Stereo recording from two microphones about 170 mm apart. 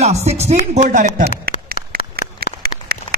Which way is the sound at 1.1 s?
60° right (ahead or behind).